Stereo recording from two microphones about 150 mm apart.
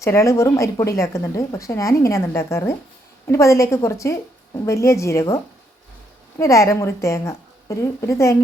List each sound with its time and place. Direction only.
0.0 s speech: 20° left (ahead or behind)
6.4 s speech: 20° left (ahead or behind)